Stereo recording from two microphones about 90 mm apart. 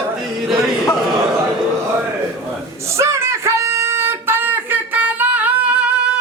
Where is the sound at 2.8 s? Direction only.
35° right (ahead or behind).